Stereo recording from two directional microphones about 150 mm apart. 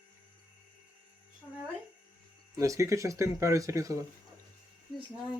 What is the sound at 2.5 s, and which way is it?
Speech, 20° right (ahead or behind).